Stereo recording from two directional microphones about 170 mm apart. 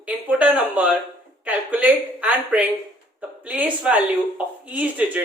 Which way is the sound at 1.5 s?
10° right (ahead or behind).